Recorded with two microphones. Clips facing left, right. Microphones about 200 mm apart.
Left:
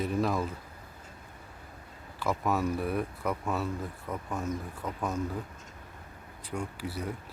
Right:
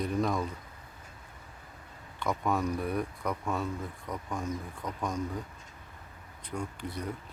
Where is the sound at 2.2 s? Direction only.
5° left (ahead or behind).